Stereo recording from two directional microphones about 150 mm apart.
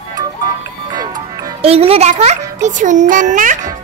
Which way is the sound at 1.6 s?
40° right (ahead or behind).